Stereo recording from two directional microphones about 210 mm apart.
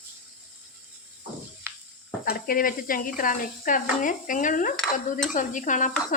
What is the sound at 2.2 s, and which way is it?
Speech, 45° left (ahead or behind).